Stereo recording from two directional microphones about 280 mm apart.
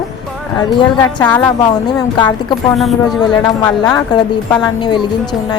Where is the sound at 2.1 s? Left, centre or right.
Centre.